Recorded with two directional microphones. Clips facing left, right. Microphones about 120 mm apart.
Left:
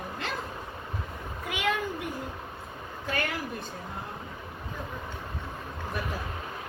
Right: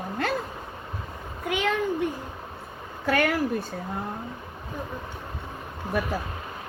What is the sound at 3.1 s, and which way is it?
Speech, 55° right (ahead or behind).